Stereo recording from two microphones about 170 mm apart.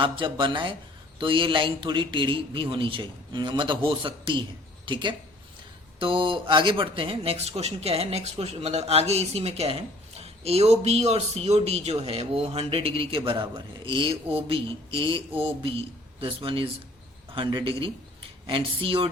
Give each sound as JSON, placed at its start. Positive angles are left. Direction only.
{"t": 0.0, "sound": "a man's voice", "side_deg": -30}